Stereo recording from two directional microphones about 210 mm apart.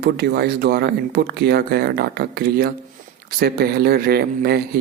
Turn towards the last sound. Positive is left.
turn(degrees=-50)  # may be behind; listen again after turning